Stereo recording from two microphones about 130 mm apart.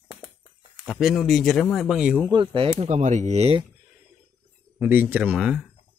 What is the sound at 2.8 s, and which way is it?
Speech, 65° right (ahead or behind).